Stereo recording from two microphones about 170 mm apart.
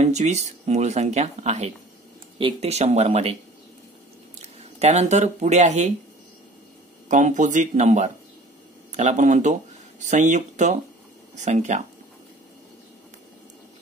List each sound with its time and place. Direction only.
0.0 s speech: 40° right (ahead or behind)
4.4 s speech: 40° right (ahead or behind)
7.1 s speech: 45° right (ahead or behind)